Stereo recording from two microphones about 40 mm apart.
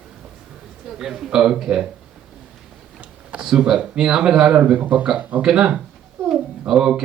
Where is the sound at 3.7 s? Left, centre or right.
Right.